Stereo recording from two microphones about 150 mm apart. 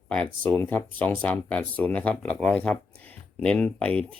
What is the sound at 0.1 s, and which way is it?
Speech, 10° left (ahead or behind).